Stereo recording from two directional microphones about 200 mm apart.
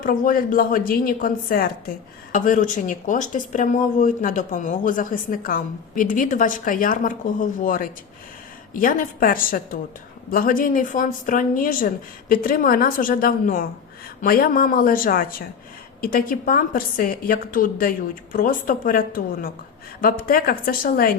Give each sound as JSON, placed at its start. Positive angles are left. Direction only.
{"t": 0.0, "sound": "a woman's voice", "side_deg": 45}